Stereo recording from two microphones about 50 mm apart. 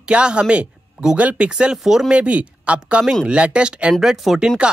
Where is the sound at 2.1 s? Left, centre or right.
Right.